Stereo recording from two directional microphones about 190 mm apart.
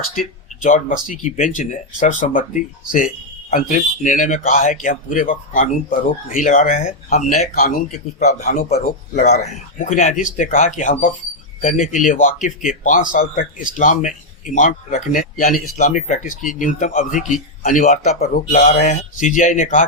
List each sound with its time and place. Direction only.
0.2 s a man's voice: 45° left (ahead or behind)
8.2 s a man's voice: 35° left (ahead or behind)